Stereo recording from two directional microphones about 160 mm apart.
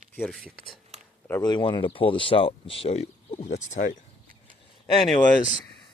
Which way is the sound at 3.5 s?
55° left (ahead or behind).